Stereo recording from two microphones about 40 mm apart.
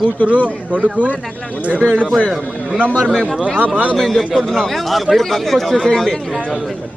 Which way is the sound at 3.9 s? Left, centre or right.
Centre.